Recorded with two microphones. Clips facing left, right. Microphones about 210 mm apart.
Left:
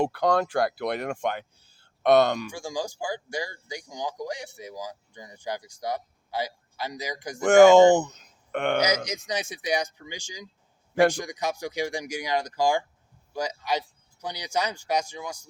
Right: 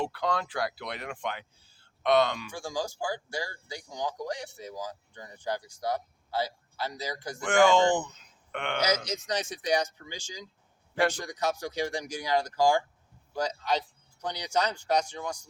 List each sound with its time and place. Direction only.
0.0 s speech: 45° left (ahead or behind)
2.5 s speech: 15° left (ahead or behind)
7.4 s speech: 45° left (ahead or behind)
9.0 s speech: 10° left (ahead or behind)